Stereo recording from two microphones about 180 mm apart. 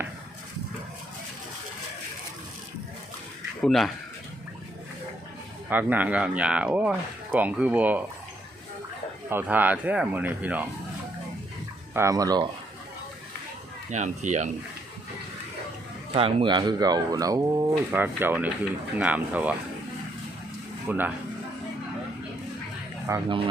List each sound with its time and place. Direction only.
3.6 s speech: centre (ahead or behind)
5.6 s speech: 10° right (ahead or behind)
9.3 s speech: 10° right (ahead or behind)
11.9 s speech: 20° right (ahead or behind)
13.9 s speech: 40° right (ahead or behind)
16.1 s speech: 30° right (ahead or behind); by 19.5 s 10° right (ahead or behind)
20.9 s speech: 10° right (ahead or behind)
23.1 s speech: 15° right (ahead or behind)